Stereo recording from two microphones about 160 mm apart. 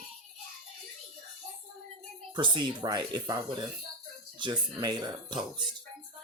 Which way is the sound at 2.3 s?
30° right (ahead or behind).